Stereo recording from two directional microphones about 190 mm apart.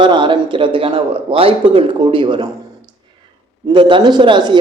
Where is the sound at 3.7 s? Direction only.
25° right (ahead or behind).